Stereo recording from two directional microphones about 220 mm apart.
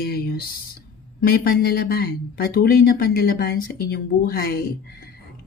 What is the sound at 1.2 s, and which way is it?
Speech, 40° left (ahead or behind).